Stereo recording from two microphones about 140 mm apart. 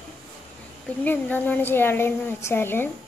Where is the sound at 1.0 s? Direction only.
10° left (ahead or behind).